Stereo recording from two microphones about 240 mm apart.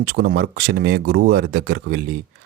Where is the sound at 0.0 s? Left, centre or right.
Right.